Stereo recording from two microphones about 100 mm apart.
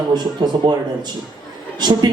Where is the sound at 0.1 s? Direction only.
45° right (ahead or behind).